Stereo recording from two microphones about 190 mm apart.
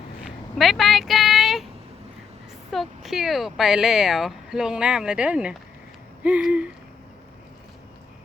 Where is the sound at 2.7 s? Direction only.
Centre (ahead or behind).